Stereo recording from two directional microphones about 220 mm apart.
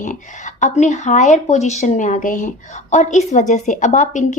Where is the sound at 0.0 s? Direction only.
35° left (ahead or behind).